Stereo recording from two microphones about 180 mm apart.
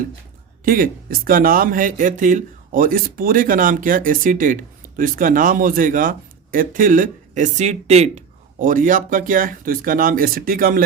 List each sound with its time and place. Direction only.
0.6 s speech: 50° right (ahead or behind)